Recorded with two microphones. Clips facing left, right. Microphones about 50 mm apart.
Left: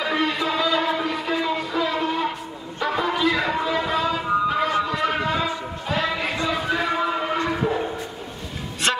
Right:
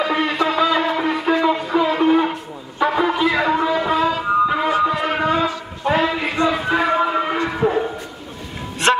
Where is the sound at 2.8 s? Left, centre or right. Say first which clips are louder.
Right 5 dB; centre.